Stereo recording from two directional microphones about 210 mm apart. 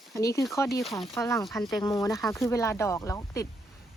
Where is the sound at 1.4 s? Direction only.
Centre (ahead or behind).